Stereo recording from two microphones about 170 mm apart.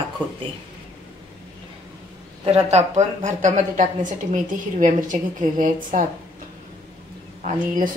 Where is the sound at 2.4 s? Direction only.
40° right (ahead or behind).